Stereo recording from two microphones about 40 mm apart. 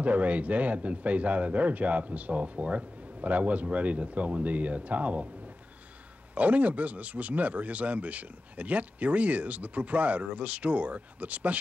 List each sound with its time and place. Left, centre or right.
0.0 s speech: right
6.3 s speech: right